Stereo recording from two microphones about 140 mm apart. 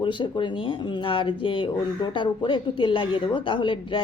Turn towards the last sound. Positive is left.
turn(degrees=35)  # may be behind; listen again after turning